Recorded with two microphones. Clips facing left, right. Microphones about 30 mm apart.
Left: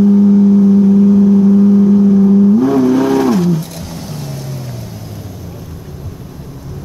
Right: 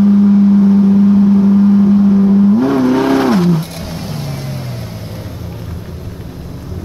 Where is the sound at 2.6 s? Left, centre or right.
Right.